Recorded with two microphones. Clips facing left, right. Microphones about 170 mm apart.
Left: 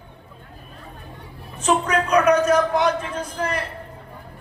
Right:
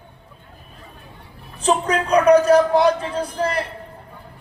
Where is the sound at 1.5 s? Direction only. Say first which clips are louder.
Right 1 dB; 35° right (ahead or behind).